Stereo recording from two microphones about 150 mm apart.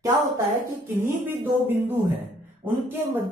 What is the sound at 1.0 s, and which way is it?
Speech, 15° right (ahead or behind).